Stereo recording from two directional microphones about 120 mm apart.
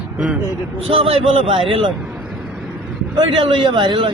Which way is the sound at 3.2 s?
45° right (ahead or behind).